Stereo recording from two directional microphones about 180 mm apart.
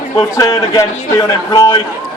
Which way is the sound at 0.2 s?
20° left (ahead or behind).